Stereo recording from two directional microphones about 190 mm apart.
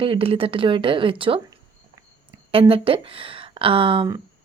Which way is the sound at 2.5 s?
30° right (ahead or behind).